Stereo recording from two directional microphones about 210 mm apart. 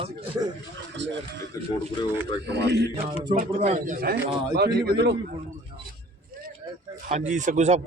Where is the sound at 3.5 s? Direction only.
35° right (ahead or behind).